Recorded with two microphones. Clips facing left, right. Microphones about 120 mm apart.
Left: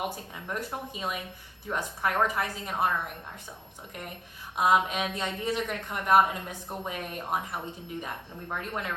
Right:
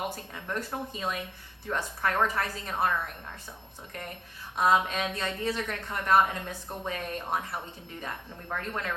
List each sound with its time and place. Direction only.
0.4 s a woman's voice: 10° left (ahead or behind)
4.5 s a woman's voice: 15° left (ahead or behind)